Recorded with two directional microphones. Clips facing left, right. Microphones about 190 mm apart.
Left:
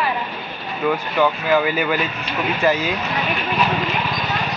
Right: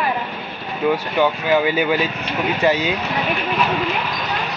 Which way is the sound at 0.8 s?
20° right (ahead or behind).